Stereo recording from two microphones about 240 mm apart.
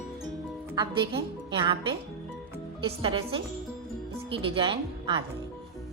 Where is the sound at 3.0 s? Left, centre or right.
Right.